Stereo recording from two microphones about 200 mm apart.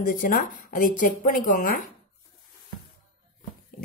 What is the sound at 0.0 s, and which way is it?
Speech, 45° left (ahead or behind).